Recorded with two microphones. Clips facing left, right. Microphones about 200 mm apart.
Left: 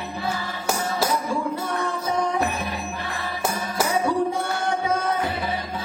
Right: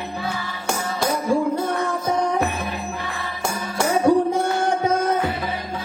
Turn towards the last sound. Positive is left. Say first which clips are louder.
# right 4 dB
turn(degrees=-40)  # may be behind; listen again after turning